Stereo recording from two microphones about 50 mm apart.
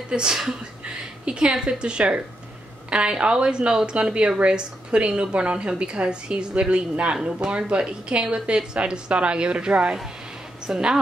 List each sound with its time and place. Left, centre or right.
0.1 s a woman's voice: centre